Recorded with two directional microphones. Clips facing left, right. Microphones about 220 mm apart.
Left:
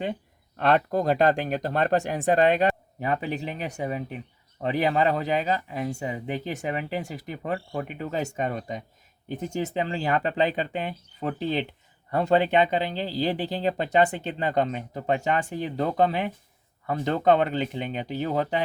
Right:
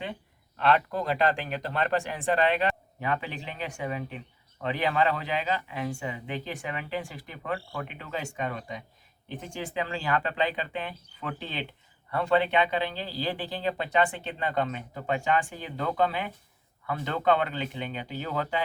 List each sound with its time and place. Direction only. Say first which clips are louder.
0.6 s speech: left 3 dB; 45° left (ahead or behind)